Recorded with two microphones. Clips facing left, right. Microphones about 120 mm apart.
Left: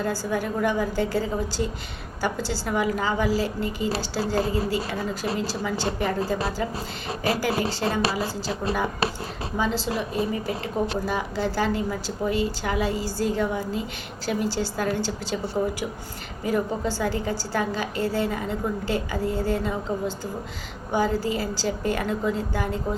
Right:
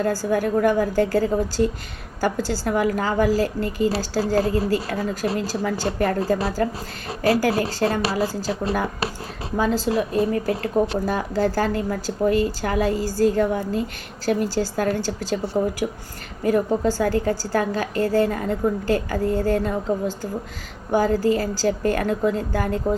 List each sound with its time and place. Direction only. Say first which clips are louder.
0.0 s a woman's voice: right 5 dB; 45° right (ahead or behind)
15.8 s a woman's voice: right 4 dB; 55° right (ahead or behind)